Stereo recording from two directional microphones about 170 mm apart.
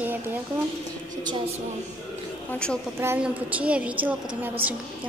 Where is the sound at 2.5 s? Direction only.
5° left (ahead or behind).